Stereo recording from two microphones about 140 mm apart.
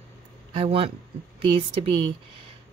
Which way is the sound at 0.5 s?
45° right (ahead or behind).